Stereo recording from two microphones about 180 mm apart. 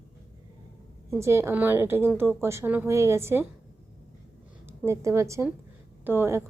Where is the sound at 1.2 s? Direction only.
15° right (ahead or behind).